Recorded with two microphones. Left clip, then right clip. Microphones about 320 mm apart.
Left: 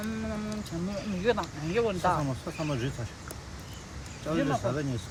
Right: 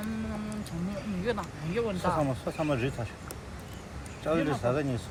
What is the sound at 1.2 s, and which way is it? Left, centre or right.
Speech, left.